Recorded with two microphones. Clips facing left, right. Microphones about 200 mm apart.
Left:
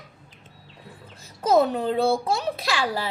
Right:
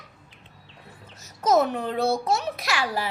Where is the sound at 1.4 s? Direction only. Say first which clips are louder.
Left 2 dB; 30° left (ahead or behind).